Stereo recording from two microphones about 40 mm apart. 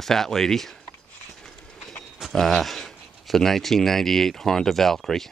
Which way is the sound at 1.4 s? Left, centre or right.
Centre.